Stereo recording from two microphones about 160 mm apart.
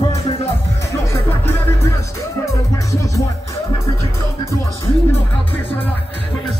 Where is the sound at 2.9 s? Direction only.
20° left (ahead or behind).